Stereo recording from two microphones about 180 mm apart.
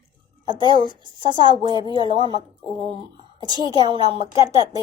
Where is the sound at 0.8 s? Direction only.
25° right (ahead or behind).